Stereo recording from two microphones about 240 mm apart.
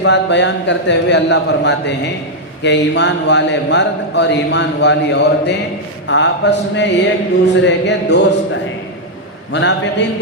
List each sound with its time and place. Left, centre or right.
0.0 s speech: left
9.5 s speech: left